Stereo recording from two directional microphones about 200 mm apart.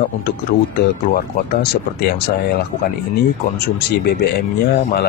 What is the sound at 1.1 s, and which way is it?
Speech, 50° left (ahead or behind).